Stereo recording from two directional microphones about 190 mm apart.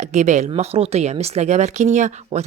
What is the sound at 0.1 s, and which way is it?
A woman's voice, 40° right (ahead or behind).